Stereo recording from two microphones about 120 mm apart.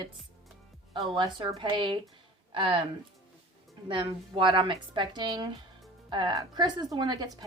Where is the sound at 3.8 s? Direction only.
45° right (ahead or behind).